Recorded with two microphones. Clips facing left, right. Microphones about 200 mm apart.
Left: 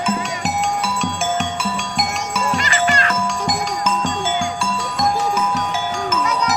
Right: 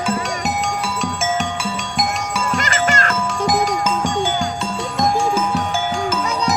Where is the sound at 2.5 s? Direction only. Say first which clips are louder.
Even; 45° right (ahead or behind).